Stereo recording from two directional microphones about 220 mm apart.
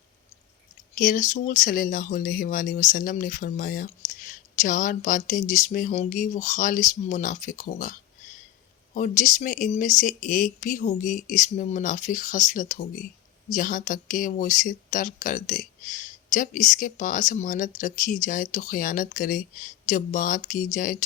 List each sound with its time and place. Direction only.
0.9 s speech: 35° left (ahead or behind)
9.0 s speech: 35° left (ahead or behind)